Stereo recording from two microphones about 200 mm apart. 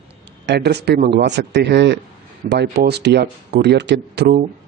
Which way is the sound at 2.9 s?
55° right (ahead or behind).